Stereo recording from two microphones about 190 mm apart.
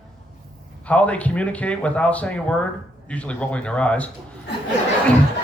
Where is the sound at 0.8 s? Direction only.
5° left (ahead or behind).